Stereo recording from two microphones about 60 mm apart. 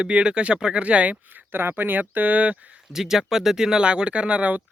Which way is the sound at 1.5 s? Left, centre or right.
Right.